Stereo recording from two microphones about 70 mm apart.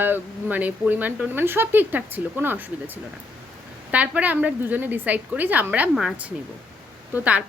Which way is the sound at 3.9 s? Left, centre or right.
Right.